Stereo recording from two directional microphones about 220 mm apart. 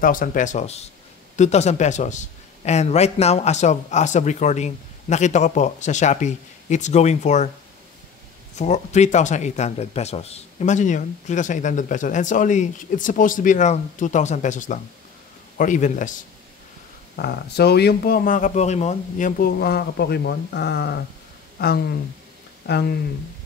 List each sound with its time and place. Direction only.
0.0 s a man's voice: 40° left (ahead or behind)
8.5 s a man's voice: 30° left (ahead or behind)
17.2 s speech: 45° left (ahead or behind)